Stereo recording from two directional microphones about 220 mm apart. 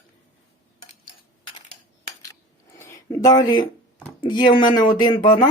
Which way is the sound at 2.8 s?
15° left (ahead or behind).